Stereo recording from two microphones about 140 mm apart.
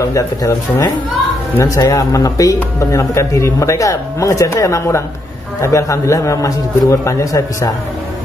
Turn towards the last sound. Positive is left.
turn(degrees=20)  # may be behind; listen again after turning